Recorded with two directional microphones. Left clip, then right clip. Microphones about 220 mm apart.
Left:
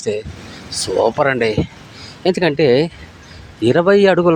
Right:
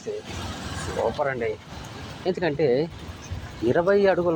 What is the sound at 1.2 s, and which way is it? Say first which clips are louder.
A man's voice: left 11 dB; 65° left (ahead or behind).